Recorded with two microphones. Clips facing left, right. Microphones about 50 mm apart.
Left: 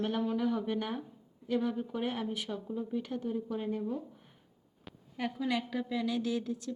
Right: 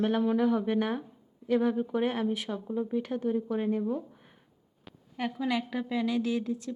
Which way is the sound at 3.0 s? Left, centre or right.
Centre.